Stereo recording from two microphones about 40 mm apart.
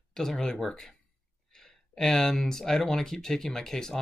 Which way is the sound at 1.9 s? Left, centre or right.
Centre.